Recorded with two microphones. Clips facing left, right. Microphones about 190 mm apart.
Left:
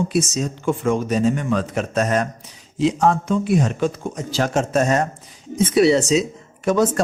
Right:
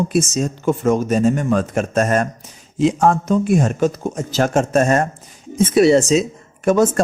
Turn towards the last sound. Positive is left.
turn(degrees=-45)  # may be behind; listen again after turning